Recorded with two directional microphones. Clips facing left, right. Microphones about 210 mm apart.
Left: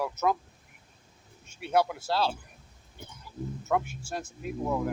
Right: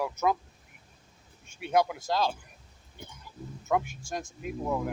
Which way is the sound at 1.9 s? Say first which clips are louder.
Even; 15° right (ahead or behind).